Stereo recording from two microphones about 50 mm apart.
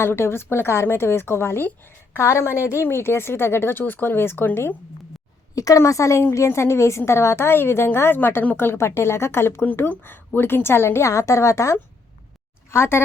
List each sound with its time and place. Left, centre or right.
0.0 s a woman's voice: left
2.1 s a woman's voice: left
2.8 s a woman's voice: left
5.7 s a woman's voice: left
6.3 s a woman's voice: left
11.0 s a woman's voice: left
12.7 s a woman's voice: left